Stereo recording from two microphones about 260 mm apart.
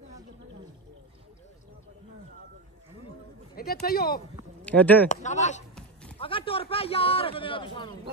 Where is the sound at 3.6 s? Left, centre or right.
Left.